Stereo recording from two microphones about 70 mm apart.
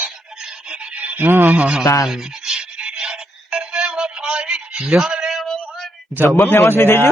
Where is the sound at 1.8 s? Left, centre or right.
Left.